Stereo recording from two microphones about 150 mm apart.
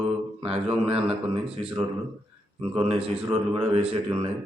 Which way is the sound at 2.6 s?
35° right (ahead or behind).